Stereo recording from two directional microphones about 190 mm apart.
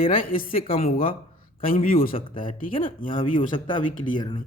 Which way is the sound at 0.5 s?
30° left (ahead or behind).